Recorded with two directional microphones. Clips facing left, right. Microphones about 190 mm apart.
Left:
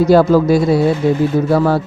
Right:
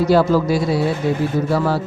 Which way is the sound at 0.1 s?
50° left (ahead or behind).